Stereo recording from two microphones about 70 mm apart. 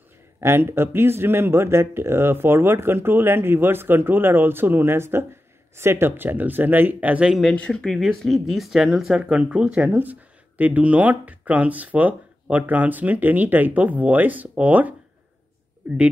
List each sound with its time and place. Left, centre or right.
0.4 s speech: right; by 7.3 s centre
7.7 s speech: centre
9.8 s speech: right